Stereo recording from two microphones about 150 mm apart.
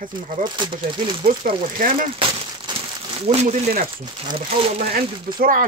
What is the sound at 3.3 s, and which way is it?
Speech, 55° right (ahead or behind).